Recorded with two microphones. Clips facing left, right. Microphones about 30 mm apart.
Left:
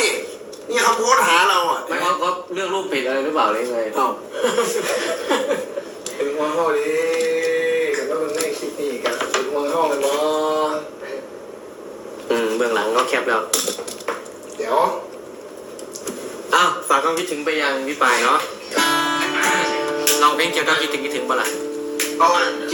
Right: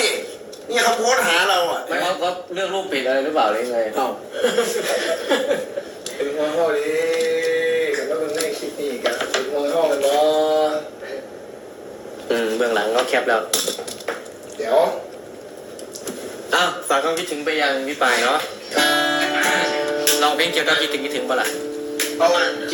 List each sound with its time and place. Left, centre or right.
0.0 s a sound: centre
0.7 s a man's voice: right
4.4 s a man's voice: centre
6.1 s a sound: centre
6.3 s a man's voice: centre
6.7 s male singing: centre
8.3 s a sound: centre
9.6 s speech: centre
12.3 s a man's voice: centre
13.5 s typing: right
14.6 s a man's voice: centre
16.6 s speech: centre